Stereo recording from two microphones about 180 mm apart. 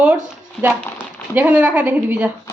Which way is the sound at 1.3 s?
10° right (ahead or behind).